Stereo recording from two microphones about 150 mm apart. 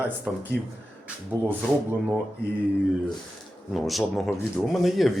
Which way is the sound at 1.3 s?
15° right (ahead or behind).